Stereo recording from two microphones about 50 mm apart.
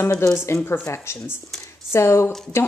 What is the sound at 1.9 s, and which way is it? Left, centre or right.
Speech, left.